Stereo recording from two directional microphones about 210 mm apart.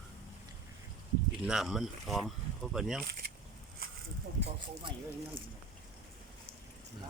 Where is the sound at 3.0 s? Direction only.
45° right (ahead or behind).